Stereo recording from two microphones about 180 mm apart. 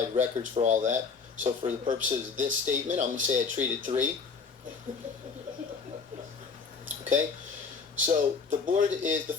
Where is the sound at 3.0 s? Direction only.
40° right (ahead or behind).